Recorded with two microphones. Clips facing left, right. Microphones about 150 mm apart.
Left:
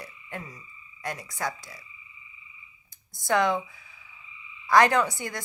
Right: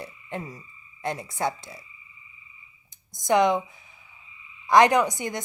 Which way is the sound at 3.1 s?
20° right (ahead or behind).